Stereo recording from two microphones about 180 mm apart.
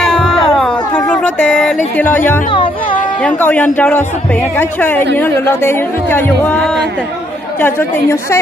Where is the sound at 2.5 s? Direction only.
30° left (ahead or behind).